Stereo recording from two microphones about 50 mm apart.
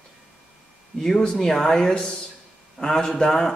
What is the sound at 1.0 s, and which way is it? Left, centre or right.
A man's voice, centre.